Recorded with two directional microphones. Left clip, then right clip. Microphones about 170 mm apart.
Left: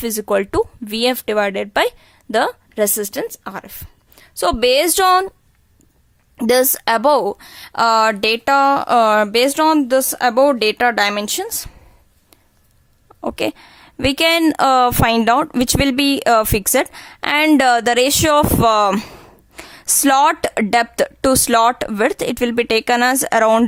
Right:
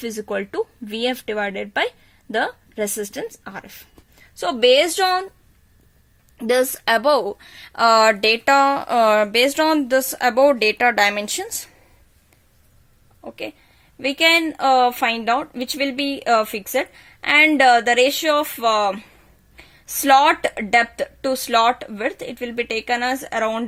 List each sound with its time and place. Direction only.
0.0 s speech: 40° left (ahead or behind)
6.3 s a woman's voice: 40° left (ahead or behind)
13.2 s speech: 50° left (ahead or behind)